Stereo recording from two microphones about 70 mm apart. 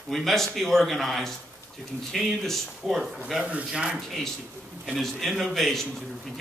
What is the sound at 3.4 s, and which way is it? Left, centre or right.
Speech, centre.